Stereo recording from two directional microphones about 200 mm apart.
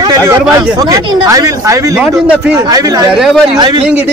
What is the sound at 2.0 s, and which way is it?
Speech, 5° right (ahead or behind).